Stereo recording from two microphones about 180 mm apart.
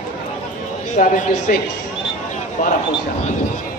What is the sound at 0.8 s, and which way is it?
Speech, 45° left (ahead or behind).